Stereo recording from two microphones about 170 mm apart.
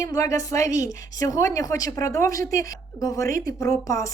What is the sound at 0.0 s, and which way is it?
Speech, 20° left (ahead or behind).